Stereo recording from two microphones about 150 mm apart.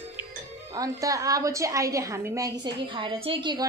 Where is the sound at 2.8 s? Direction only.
35° right (ahead or behind).